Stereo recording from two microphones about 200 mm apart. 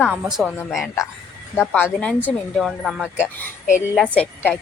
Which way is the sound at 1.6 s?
10° left (ahead or behind).